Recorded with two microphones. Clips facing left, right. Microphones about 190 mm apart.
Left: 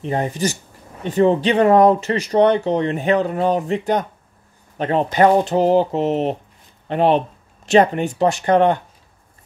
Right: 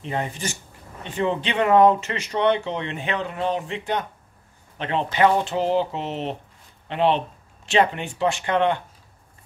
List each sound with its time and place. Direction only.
0.0 s speech: 40° left (ahead or behind)